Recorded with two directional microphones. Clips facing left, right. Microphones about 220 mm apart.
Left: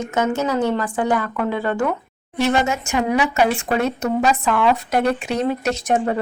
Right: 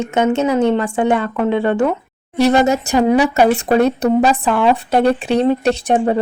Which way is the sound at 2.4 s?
35° right (ahead or behind).